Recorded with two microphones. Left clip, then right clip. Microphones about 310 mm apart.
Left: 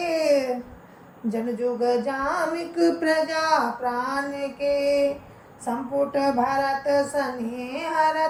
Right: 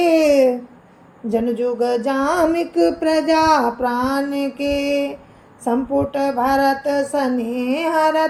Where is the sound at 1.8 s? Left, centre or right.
Right.